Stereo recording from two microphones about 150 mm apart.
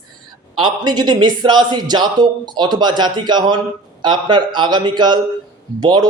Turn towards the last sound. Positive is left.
turn(degrees=-30)  # may be behind; listen again after turning